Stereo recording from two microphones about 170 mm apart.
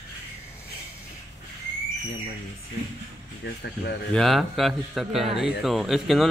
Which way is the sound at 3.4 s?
90° left.